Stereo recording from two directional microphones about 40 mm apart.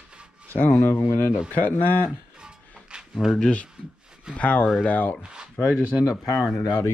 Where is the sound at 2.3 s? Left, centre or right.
Centre.